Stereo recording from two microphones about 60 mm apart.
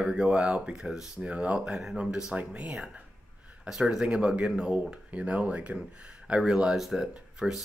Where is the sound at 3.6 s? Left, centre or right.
Centre.